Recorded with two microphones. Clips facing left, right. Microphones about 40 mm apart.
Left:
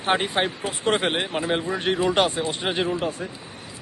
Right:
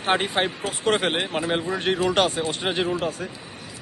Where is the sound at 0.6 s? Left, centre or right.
Left.